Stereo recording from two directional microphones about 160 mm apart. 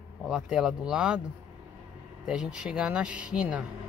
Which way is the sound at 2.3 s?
5° right (ahead or behind).